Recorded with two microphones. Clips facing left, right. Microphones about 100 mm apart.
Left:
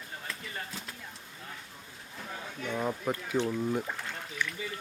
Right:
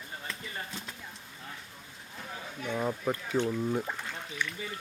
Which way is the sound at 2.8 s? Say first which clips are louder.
Right 1 dB; 5° left (ahead or behind).